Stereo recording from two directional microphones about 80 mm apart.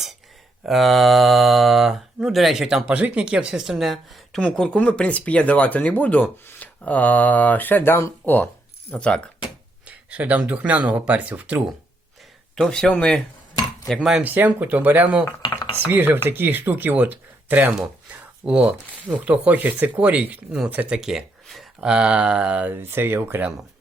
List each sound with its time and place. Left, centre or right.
0.6 s speech: centre
4.4 s speech: centre
9.8 s speech: centre
12.5 s speech: centre
13.8 s speech: centre
14.2 s speech: right
15.4 s cutlery: left
15.9 s speech: right
21.0 s speech: centre
21.4 s a sound: centre
21.8 s speech: centre
22.7 s speech: right